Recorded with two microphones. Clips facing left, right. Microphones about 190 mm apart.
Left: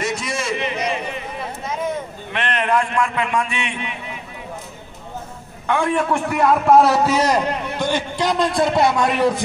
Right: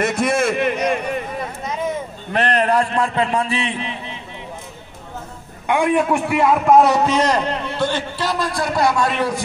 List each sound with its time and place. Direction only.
0.0 s a sound: 55° right (ahead or behind)
2.3 s a man's voice: 40° right (ahead or behind)
5.7 s a man's voice: 15° right (ahead or behind); by 9.0 s 25° left (ahead or behind)